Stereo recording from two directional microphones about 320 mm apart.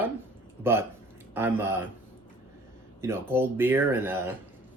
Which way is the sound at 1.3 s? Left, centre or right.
Centre.